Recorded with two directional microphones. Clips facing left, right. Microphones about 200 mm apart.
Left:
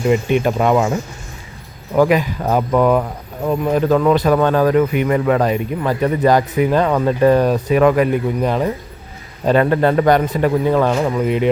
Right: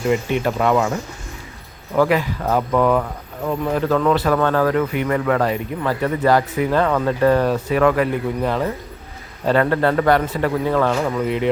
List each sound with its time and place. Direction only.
0.1 s speech: 20° left (ahead or behind)
2.0 s speech: 15° left (ahead or behind)